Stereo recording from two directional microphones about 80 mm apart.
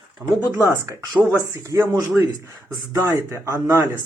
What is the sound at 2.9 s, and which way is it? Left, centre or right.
Speech, right.